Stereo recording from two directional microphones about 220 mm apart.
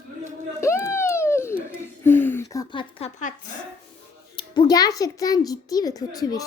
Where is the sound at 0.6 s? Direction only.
10° left (ahead or behind).